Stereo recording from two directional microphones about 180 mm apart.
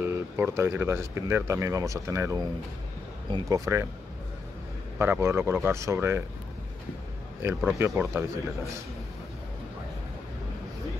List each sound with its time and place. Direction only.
0.0 s speech: 15° right (ahead or behind)
4.9 s speech: 15° right (ahead or behind)
7.4 s speech: 15° right (ahead or behind)